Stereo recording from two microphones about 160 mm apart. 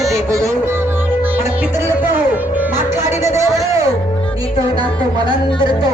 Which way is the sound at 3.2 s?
15° right (ahead or behind).